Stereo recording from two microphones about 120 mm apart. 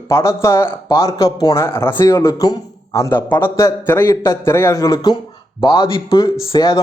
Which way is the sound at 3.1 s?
15° left (ahead or behind).